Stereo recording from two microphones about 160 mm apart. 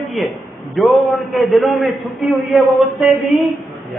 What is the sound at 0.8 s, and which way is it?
A man's voice, centre (ahead or behind).